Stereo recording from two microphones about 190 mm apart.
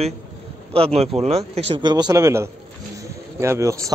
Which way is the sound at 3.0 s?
15° right (ahead or behind).